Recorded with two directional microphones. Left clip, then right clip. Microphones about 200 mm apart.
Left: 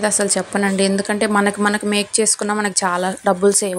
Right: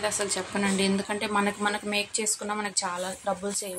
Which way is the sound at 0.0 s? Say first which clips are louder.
Left 10 dB; 35° left (ahead or behind).